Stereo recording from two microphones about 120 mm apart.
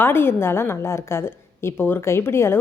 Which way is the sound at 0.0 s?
20° left (ahead or behind).